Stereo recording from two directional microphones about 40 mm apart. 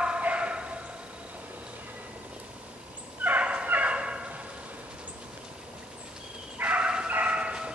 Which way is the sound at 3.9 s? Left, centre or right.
Right.